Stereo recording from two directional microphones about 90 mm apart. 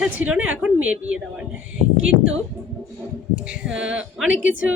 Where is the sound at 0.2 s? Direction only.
15° right (ahead or behind).